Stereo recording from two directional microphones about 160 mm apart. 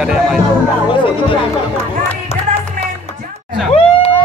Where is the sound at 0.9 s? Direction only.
30° left (ahead or behind).